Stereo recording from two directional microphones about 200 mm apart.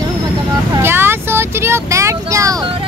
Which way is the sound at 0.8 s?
10° right (ahead or behind).